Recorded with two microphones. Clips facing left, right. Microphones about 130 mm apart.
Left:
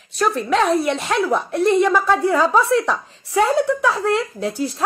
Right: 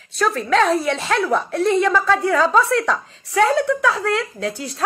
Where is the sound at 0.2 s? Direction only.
10° left (ahead or behind).